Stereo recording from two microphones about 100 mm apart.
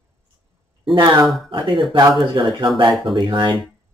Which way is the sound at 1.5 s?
55° right (ahead or behind).